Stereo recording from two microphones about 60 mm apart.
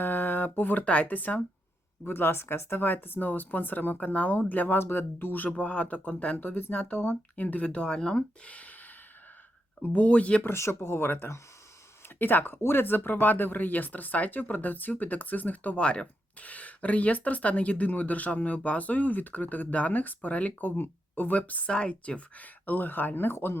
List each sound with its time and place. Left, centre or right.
0.0 s speech: left
2.0 s speech: left
5.5 s speech: left
10.4 s speech: left